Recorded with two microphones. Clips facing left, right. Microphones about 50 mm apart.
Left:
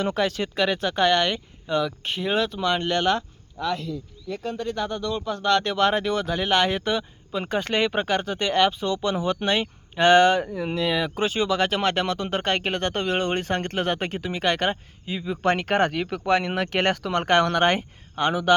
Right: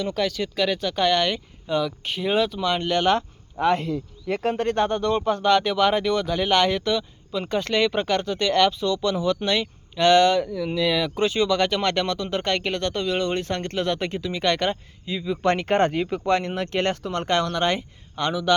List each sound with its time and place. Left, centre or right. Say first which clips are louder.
0.1 s speech: left 1 dB; left
0.4 s speech: even; centre
0.9 s speech: left 1 dB; centre
3.1 s a sound: right 2 dB; right
3.7 s speech: right 6 dB; right
4.3 s speech: right 6 dB; right
5.4 s speech: left 1 dB; centre
6.7 s speech: right 1 dB; centre
10.4 s speech: right 1 dB; left
10.8 s speech: right 2 dB; centre
12.1 s speech: even; left
17.1 s speech: left 3 dB; left
18.2 s speech: left 2 dB; left